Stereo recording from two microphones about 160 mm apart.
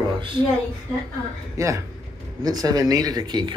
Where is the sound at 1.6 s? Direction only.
20° right (ahead or behind).